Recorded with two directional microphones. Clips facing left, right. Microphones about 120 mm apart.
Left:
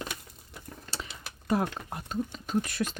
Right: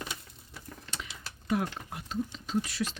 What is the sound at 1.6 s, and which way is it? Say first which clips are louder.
Speech: left 3 dB; 45° left (ahead or behind).